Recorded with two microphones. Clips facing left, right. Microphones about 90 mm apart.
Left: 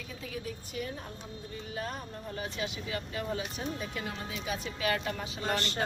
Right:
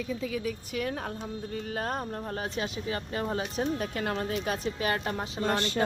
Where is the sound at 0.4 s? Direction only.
90° right.